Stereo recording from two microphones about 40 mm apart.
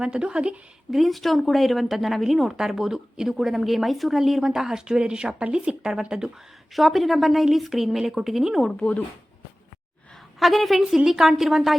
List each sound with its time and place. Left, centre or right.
0.0 s speech: right
0.9 s speech: centre
6.7 s speech: centre
10.4 s speech: centre